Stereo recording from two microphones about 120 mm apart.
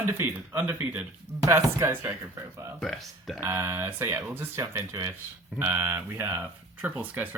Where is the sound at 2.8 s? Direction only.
Centre (ahead or behind).